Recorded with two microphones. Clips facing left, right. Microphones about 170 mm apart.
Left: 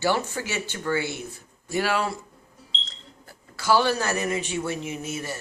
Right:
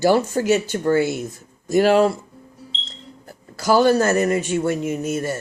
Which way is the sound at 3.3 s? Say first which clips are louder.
Right 4 dB; 40° right (ahead or behind).